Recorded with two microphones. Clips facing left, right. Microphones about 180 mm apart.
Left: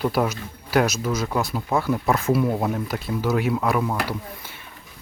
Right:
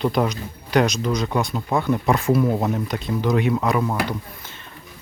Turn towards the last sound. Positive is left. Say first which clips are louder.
# right 2 dB
turn(degrees=0)  # may be behind; listen again after turning